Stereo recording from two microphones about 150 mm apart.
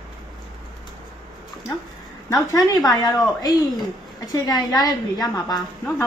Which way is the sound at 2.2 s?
25° left (ahead or behind).